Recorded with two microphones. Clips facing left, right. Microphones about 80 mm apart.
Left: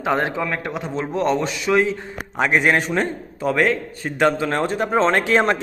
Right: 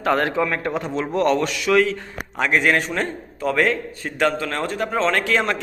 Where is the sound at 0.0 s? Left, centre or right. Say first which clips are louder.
Right 1 dB; centre.